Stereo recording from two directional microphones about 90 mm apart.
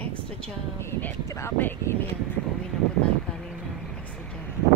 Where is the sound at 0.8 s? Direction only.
25° left (ahead or behind).